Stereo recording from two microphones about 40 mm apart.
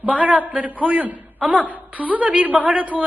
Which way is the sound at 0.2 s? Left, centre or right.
Right.